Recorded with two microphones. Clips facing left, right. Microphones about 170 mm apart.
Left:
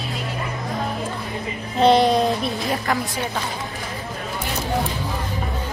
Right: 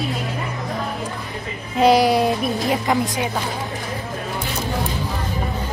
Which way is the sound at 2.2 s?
20° right (ahead or behind).